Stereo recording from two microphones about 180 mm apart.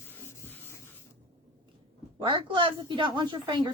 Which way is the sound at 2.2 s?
30° right (ahead or behind).